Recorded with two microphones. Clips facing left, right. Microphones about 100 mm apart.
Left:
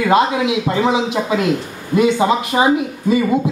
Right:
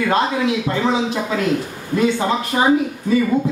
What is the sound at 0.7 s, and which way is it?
Speech, 15° left (ahead or behind).